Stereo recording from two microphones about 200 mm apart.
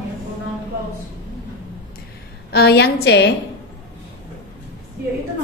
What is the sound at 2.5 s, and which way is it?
Speech, 55° left (ahead or behind).